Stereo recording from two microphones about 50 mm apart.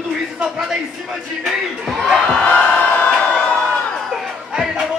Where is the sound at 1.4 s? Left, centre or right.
Centre.